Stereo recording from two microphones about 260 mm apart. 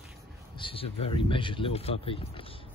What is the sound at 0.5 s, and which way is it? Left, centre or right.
Speech, centre.